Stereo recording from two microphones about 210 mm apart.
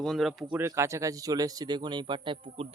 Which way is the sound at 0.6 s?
15° right (ahead or behind).